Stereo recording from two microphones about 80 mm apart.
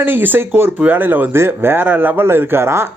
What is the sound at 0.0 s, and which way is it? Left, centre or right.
A man's voice, right.